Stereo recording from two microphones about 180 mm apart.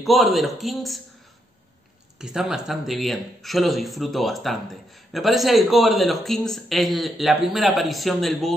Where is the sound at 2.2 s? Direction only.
5° right (ahead or behind).